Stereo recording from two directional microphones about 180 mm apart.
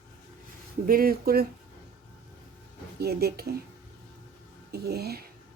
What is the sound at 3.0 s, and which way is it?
Speech, 60° right (ahead or behind).